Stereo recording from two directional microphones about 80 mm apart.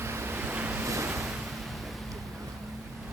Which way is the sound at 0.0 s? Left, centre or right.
Right.